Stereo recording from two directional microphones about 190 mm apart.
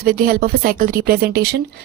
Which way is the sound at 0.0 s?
50° right (ahead or behind).